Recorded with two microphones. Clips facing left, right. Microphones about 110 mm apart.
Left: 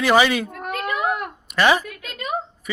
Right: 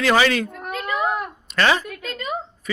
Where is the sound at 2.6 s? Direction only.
15° left (ahead or behind).